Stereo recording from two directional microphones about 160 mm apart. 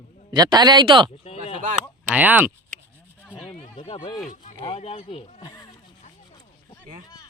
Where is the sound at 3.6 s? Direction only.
40° left (ahead or behind).